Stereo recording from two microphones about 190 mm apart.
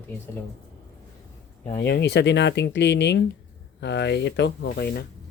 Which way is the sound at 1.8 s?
60° left (ahead or behind).